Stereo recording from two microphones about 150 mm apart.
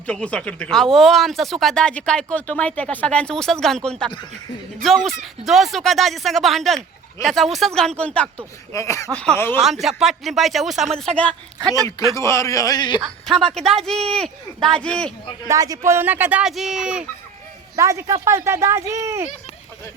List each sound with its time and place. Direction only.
0.1 s speech: 5° left (ahead or behind)
8.7 s speech: 20° left (ahead or behind)
9.6 s speech: centre (ahead or behind)
11.9 s speech: 20° left (ahead or behind)
13.4 s speech: 5° left (ahead or behind)
15.4 s speech: 25° right (ahead or behind); by 17.0 s 5° right (ahead or behind)
17.7 s speech: 20° right (ahead or behind)